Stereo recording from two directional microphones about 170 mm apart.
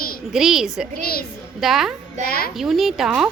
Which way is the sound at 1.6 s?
Centre (ahead or behind).